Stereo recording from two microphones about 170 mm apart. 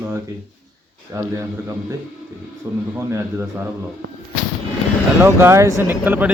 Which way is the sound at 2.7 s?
20° right (ahead or behind).